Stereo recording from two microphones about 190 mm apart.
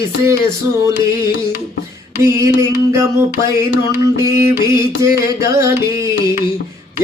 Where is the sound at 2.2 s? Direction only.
15° right (ahead or behind).